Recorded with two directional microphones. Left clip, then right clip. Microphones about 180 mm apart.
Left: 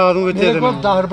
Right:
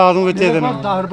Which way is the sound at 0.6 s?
40° left (ahead or behind).